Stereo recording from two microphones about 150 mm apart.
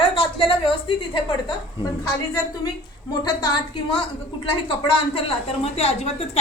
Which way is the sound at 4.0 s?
35° left (ahead or behind).